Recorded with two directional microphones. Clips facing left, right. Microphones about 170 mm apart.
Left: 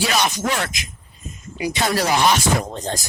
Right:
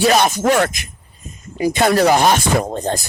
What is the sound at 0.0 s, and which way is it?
Speech, 50° right (ahead or behind).